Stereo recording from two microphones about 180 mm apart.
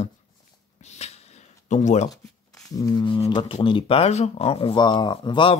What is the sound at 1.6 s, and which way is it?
Speech, 40° left (ahead or behind).